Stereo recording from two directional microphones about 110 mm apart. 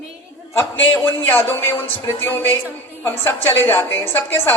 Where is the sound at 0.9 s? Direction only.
20° left (ahead or behind).